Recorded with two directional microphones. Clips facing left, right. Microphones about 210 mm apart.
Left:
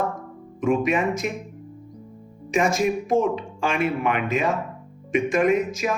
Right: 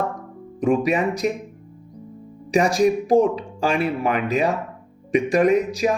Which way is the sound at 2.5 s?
35° right (ahead or behind).